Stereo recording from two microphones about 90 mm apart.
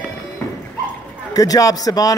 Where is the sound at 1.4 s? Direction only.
40° left (ahead or behind).